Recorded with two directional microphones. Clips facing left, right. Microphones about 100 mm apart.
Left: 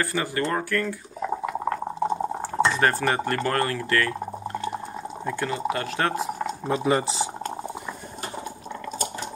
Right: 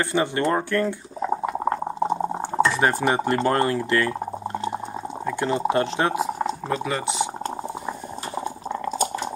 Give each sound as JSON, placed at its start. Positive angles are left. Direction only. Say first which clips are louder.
{"t": 0.0, "sound": "speech", "louder": "right 4 dB", "side_deg": -25}
{"t": 1.4, "sound": "boiling", "louder": "right 3 dB", "side_deg": -25}
{"t": 5.4, "sound": "speech", "louder": "right 6 dB", "side_deg": -30}
{"t": 6.8, "sound": "speech", "louder": "left 2 dB", "side_deg": 30}